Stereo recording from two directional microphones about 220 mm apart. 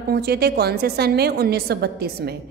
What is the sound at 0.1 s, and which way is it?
A woman's voice, 45° right (ahead or behind).